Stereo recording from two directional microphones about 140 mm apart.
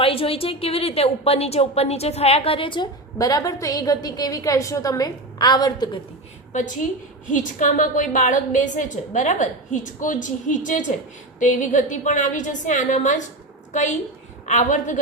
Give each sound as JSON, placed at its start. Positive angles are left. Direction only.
{"t": 0.0, "sound": "a woman's voice", "side_deg": 40}
{"t": 6.5, "sound": "a woman's voice", "side_deg": 65}
{"t": 14.4, "sound": "a woman's voice", "side_deg": 60}